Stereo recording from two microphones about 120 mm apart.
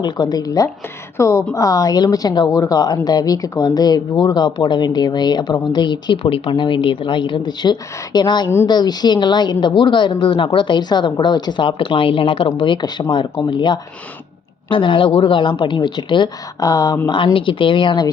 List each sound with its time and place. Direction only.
0.0 s speech: 35° left (ahead or behind)
17.1 s speech: 40° left (ahead or behind)